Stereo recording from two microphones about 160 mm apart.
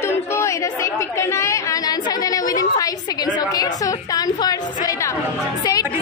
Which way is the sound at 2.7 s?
25° left (ahead or behind).